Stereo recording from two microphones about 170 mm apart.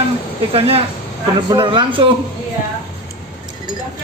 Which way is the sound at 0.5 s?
35° right (ahead or behind).